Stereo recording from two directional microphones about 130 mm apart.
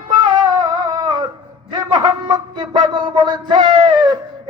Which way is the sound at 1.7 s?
35° right (ahead or behind).